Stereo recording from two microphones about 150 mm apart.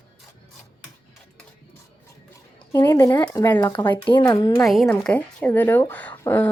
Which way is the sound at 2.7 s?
15° left (ahead or behind).